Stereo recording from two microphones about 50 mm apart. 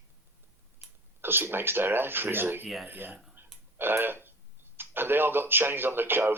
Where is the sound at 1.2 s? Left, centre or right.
Right.